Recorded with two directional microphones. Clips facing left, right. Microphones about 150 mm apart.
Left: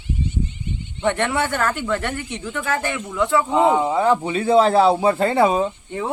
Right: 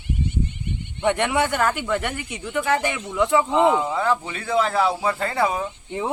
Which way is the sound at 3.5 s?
20° left (ahead or behind).